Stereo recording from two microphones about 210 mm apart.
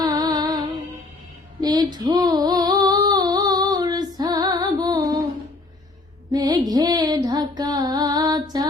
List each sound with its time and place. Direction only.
0.0 s music: 20° right (ahead or behind)
1.6 s female singing: 20° right (ahead or behind)
6.3 s music: 20° right (ahead or behind)